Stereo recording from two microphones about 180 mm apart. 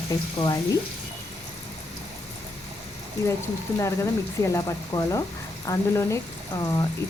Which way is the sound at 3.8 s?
15° left (ahead or behind).